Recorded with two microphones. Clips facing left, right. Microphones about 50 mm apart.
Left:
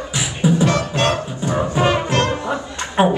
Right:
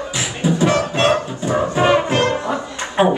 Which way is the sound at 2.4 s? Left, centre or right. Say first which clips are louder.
Right 1 dB; centre.